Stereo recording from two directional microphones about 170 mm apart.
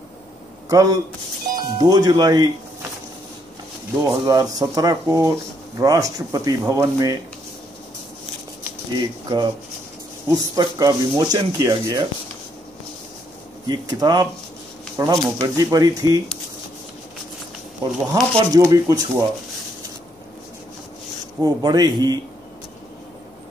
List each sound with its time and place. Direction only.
0.7 s speech: 20° right (ahead or behind)
4.0 s speech: 20° right (ahead or behind)
8.9 s speech: 25° right (ahead or behind)
13.7 s speech: 25° right (ahead or behind)
18.1 s speech: 20° right (ahead or behind)
21.4 s speech: 20° right (ahead or behind)